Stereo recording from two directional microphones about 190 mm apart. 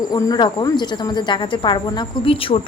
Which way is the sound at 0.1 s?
20° left (ahead or behind).